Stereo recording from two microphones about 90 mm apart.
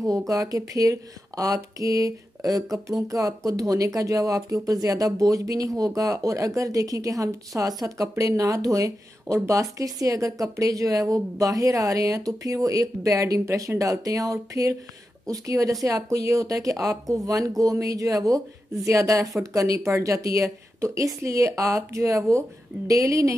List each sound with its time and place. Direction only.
0.3 s speech: 40° right (ahead or behind)